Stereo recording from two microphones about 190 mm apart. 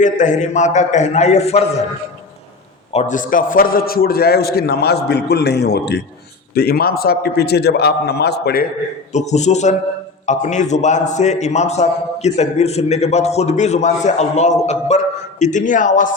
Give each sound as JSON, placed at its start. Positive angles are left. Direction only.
{"t": 0.0, "sound": "a man's voice", "side_deg": 40}
{"t": 2.9, "sound": "a man's voice", "side_deg": 40}
{"t": 9.1, "sound": "a man's voice", "side_deg": 35}